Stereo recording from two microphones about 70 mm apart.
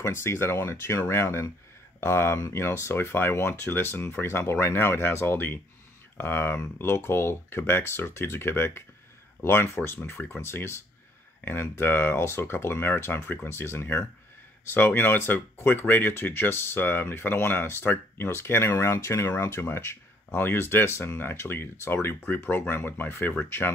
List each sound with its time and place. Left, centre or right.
0.0 s speech: left